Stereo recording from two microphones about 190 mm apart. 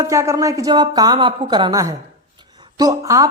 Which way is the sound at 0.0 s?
15° right (ahead or behind).